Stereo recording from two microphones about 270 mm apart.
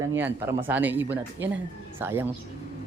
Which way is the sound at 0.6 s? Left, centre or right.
Centre.